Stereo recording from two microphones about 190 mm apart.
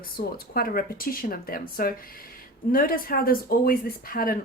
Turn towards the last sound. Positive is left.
turn(degrees=50)  # may be behind; listen again after turning